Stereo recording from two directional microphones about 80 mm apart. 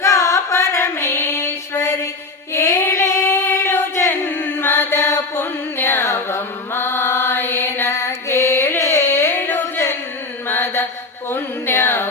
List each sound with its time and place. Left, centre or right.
0.0 s music: left
2.5 s singing: left
10.5 s mantra: left